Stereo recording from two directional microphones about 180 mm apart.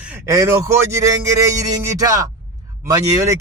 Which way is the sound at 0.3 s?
15° right (ahead or behind).